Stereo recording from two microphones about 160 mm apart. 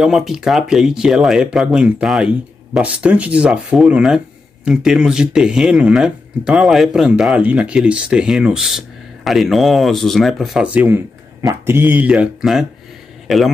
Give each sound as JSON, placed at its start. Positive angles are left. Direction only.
{"t": 0.0, "sound": "speech", "side_deg": 0}